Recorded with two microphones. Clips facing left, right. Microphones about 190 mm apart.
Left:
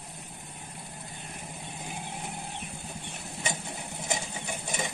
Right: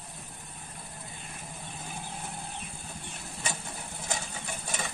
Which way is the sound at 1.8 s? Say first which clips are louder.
Left 2 dB; 15° left (ahead or behind).